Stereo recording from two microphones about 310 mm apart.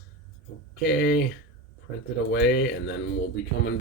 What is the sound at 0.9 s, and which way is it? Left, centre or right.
Speech, left.